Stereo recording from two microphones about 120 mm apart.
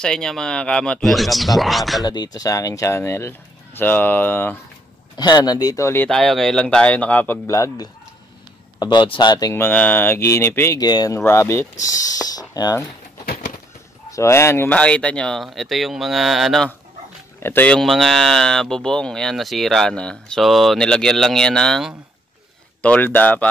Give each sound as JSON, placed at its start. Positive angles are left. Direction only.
{"t": 0.0, "sound": "speech", "side_deg": 5}
{"t": 2.0, "sound": "speech", "side_deg": 35}
{"t": 5.1, "sound": "speech", "side_deg": 35}
{"t": 6.0, "sound": "speech", "side_deg": 5}
{"t": 8.7, "sound": "speech", "side_deg": 40}
{"t": 9.5, "sound": "speech", "side_deg": 15}
{"t": 10.8, "sound": "speech", "side_deg": 35}
{"t": 11.1, "sound": "speech", "side_deg": 20}
{"t": 14.1, "sound": "speech", "side_deg": 25}
{"t": 14.8, "sound": "speech", "side_deg": 10}
{"t": 17.4, "sound": "speech", "side_deg": 20}
{"t": 17.6, "sound": "speech", "side_deg": 0}